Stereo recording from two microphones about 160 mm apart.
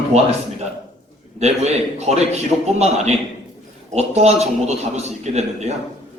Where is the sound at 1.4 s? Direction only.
40° right (ahead or behind).